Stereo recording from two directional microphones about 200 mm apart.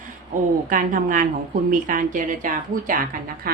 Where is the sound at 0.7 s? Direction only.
40° right (ahead or behind).